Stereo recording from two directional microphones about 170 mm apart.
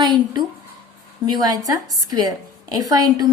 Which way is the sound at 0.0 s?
25° right (ahead or behind).